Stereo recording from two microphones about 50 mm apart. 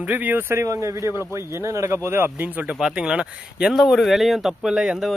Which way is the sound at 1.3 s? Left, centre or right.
Right.